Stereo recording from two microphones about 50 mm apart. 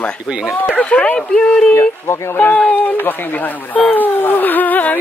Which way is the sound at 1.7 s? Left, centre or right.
Left.